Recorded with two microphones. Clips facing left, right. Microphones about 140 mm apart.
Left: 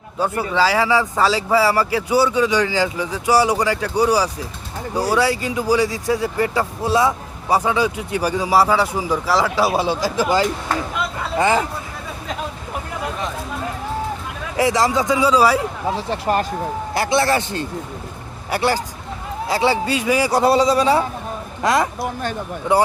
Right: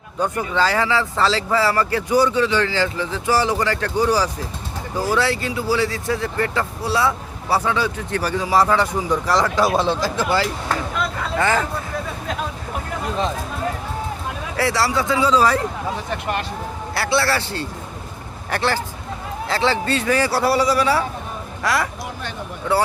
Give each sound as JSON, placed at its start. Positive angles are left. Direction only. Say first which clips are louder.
{"t": 0.2, "sound": "speech", "louder": "left 2 dB", "side_deg": 5}
{"t": 14.5, "sound": "speech", "louder": "left 3 dB", "side_deg": 15}
{"t": 16.0, "sound": "speech", "louder": "left 5 dB", "side_deg": 30}
{"t": 16.9, "sound": "a man's voice", "louder": "left 2 dB", "side_deg": 20}